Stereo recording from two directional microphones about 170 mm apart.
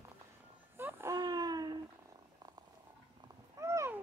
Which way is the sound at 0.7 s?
15° right (ahead or behind).